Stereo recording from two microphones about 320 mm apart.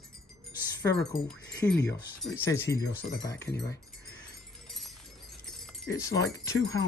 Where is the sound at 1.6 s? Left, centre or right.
Centre.